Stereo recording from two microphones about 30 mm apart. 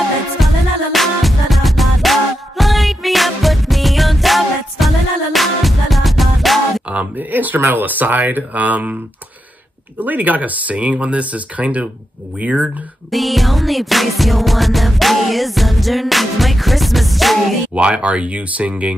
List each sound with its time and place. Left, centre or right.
0.4 s music: centre
7.2 s speech: right
9.9 s speech: right
10.9 s speech: right
13.1 s music: centre
17.7 s speech: right